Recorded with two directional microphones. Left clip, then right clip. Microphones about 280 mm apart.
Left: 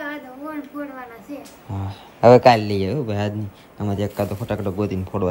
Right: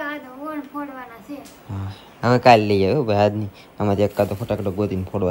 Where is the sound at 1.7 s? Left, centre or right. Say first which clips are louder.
Left 3 dB; right.